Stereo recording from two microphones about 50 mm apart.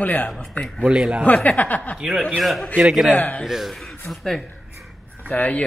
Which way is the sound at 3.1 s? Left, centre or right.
Left.